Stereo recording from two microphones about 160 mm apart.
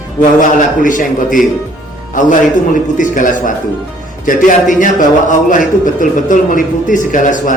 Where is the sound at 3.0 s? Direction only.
55° left (ahead or behind).